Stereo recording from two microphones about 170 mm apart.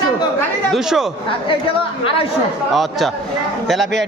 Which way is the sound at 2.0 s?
35° left (ahead or behind).